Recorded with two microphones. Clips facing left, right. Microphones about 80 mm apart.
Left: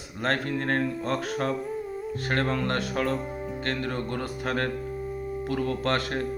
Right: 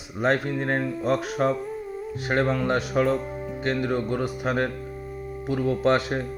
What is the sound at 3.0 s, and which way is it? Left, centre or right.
Speech, centre.